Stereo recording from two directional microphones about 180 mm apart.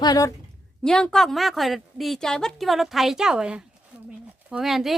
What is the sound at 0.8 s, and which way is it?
A woman's voice, 5° left (ahead or behind).